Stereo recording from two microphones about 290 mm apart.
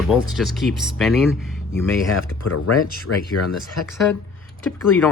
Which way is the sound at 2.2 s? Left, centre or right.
Left.